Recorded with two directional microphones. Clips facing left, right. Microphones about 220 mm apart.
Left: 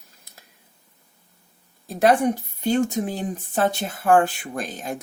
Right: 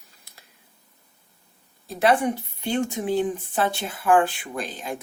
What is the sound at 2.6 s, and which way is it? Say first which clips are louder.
Speech: left 5 dB; 45° left (ahead or behind).